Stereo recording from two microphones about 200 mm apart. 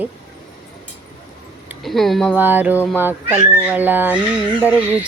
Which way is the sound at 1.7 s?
Centre (ahead or behind).